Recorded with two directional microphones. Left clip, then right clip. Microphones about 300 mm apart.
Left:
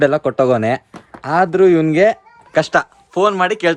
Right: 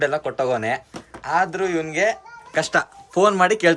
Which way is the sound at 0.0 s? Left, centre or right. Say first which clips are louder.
Left 8 dB; centre.